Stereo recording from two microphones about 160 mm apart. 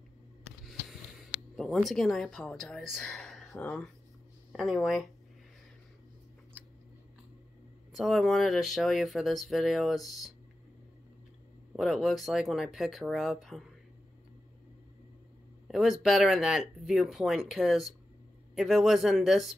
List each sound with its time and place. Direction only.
1.6 s speech: centre (ahead or behind)
7.9 s speech: centre (ahead or behind)
11.7 s speech: centre (ahead or behind)
15.7 s speech: centre (ahead or behind)